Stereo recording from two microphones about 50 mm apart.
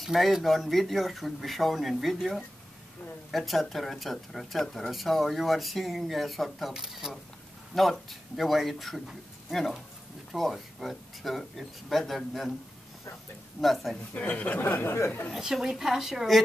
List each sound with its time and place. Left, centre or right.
0.0 s speech: centre
6.7 s a woman's voice: centre
7.7 s speech: centre
13.6 s speech: centre
14.1 s speech: left
14.6 s speech: left
15.3 s a woman's voice: centre